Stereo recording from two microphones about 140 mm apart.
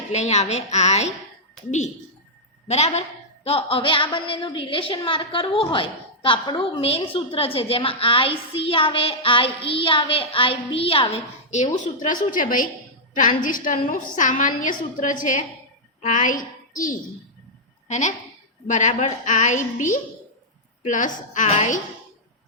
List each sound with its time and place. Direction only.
0.1 s a woman's voice: 55° left (ahead or behind)
2.6 s a woman's voice: 50° left (ahead or behind)
11.5 s a woman's voice: 60° left (ahead or behind)
17.8 s a woman's voice: 60° left (ahead or behind)